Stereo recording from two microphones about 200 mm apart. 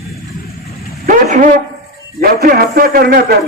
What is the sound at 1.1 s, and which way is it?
Speech, 40° right (ahead or behind).